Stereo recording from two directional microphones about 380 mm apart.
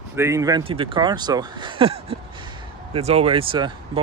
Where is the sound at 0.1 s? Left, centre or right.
Centre.